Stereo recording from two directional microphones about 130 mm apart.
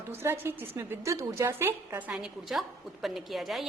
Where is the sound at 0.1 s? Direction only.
20° right (ahead or behind).